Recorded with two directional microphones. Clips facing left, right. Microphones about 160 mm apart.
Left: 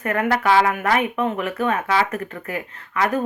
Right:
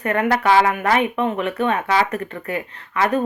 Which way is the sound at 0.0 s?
30° right (ahead or behind).